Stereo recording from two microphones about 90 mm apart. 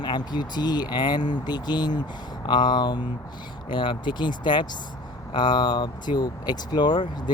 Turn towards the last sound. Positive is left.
turn(degrees=55)  # may be behind; listen again after turning